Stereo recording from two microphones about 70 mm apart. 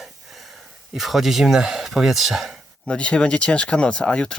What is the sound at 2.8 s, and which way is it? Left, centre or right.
Speech, centre.